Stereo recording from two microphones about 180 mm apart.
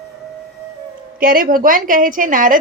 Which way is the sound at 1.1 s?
50° right (ahead or behind).